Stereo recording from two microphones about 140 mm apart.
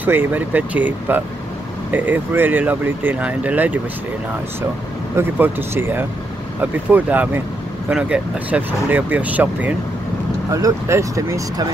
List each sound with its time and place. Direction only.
0.0 s speech: 15° right (ahead or behind)
5.1 s speech: 15° right (ahead or behind)
10.5 s speech: 20° right (ahead or behind)